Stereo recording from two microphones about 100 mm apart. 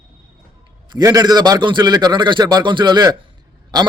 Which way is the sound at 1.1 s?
40° right (ahead or behind).